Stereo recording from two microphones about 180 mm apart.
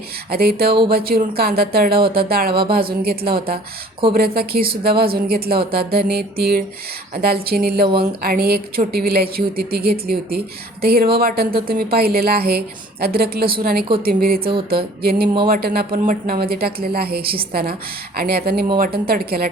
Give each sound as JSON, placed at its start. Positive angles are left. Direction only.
{"t": 0.3, "sound": "speech", "side_deg": -60}